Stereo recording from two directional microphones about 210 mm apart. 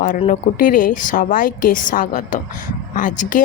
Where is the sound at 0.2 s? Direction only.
40° left (ahead or behind).